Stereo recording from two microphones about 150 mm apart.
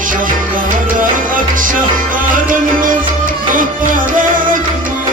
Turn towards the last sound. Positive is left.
turn(degrees=-65)  # may be behind; listen again after turning